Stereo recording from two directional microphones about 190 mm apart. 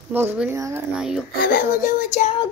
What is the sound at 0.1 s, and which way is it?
Speech, 10° right (ahead or behind).